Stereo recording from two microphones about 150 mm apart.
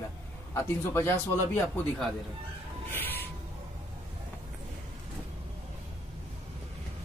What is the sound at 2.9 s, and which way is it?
Crow, 15° left (ahead or behind).